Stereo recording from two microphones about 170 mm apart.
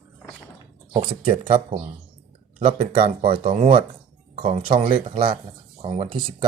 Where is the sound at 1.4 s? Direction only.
50° right (ahead or behind).